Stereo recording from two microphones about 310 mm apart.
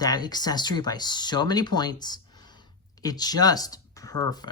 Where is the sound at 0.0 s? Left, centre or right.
Centre.